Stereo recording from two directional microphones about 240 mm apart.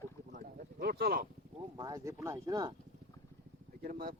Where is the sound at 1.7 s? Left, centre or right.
Centre.